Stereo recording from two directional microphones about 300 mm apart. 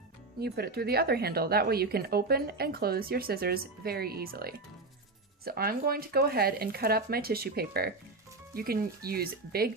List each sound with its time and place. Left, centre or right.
0.3 s speech: right